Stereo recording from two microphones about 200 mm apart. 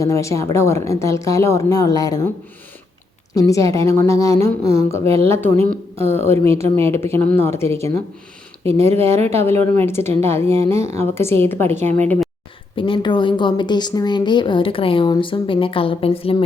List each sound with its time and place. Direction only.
0.0 s a woman's voice: 15° left (ahead or behind)
3.3 s a woman's voice: 15° left (ahead or behind)
6.1 s a woman's voice: 10° left (ahead or behind)
6.5 s speech: 30° right (ahead or behind)
6.8 s a woman's voice: 10° left (ahead or behind)
12.7 s a woman's voice: 25° left (ahead or behind)